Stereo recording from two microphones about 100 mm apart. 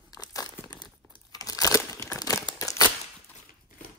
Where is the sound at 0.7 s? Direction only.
45° left (ahead or behind); by 2.2 s 30° left (ahead or behind).